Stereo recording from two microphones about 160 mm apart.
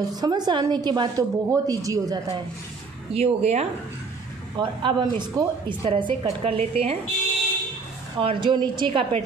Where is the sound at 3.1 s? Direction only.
40° right (ahead or behind).